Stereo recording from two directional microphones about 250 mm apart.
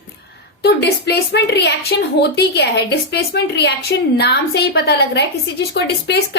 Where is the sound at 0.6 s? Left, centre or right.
Left.